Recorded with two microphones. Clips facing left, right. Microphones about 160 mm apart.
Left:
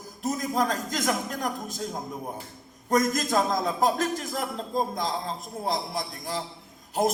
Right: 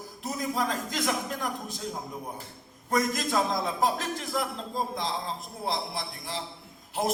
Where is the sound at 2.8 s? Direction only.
45° left (ahead or behind).